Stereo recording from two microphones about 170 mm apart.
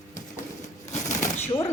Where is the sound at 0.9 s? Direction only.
45° left (ahead or behind).